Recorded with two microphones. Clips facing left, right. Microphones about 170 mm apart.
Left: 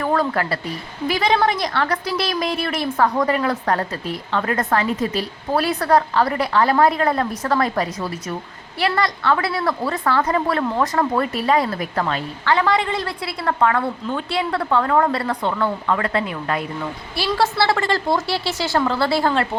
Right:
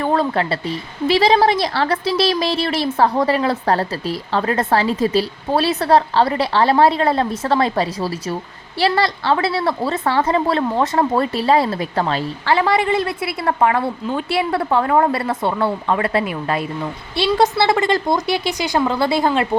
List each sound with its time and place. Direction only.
0.0 s a woman's voice: 25° right (ahead or behind)